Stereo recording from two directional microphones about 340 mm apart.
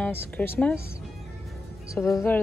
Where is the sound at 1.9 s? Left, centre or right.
Centre.